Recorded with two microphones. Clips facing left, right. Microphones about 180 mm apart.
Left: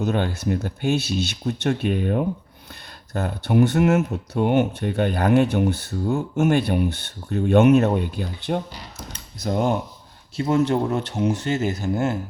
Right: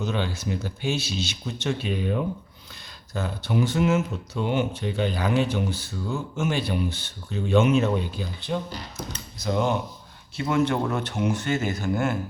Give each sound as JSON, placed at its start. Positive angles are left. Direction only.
{"t": 0.0, "sound": "speech", "side_deg": 55}
{"t": 10.3, "sound": "speech", "side_deg": 40}